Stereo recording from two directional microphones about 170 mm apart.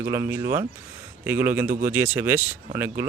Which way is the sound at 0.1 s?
15° right (ahead or behind).